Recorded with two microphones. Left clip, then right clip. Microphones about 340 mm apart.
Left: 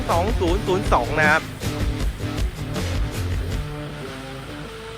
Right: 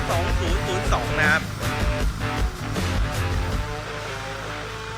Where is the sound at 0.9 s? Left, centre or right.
Centre.